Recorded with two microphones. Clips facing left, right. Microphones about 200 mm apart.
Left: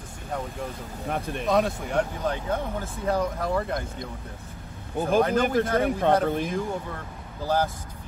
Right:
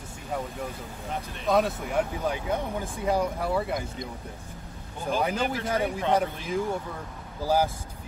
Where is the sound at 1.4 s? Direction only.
Centre (ahead or behind).